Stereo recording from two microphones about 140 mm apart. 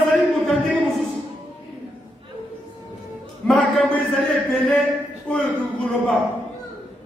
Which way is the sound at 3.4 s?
5° left (ahead or behind).